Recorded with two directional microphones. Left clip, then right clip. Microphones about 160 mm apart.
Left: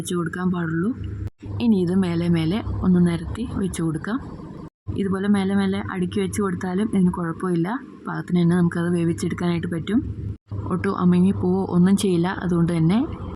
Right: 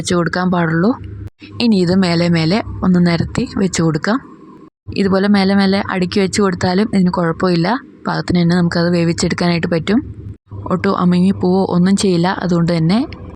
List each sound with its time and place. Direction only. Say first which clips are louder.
0.1 s speech: right 11 dB; 35° right (ahead or behind)
10.7 s speech: right 7 dB; 30° right (ahead or behind)